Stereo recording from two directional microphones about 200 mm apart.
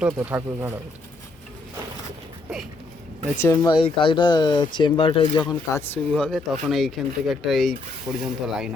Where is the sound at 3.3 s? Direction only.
15° left (ahead or behind).